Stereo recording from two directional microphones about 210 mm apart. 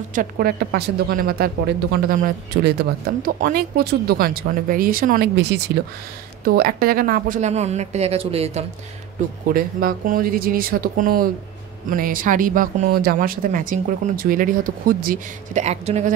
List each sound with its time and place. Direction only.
0.1 s speech: 45° right (ahead or behind)
9.5 s speech: 45° right (ahead or behind)